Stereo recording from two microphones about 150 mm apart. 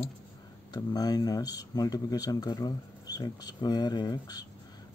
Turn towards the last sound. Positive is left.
turn(degrees=30)  # may be behind; listen again after turning